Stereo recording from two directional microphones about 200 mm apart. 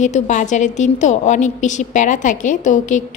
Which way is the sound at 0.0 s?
35° left (ahead or behind).